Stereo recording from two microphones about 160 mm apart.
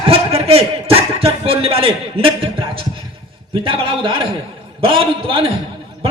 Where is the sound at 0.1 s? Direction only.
35° right (ahead or behind).